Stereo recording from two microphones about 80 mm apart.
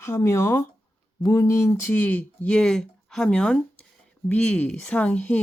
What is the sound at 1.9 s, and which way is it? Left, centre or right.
Speech, left.